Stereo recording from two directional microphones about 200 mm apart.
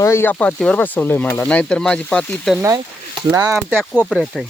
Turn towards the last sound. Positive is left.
turn(degrees=5)  # may be behind; listen again after turning